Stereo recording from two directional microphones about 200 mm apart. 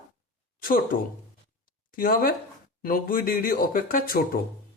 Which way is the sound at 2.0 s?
45° left (ahead or behind).